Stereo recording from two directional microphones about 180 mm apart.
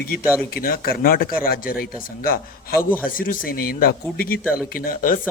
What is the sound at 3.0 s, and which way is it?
A man's voice, 50° left (ahead or behind).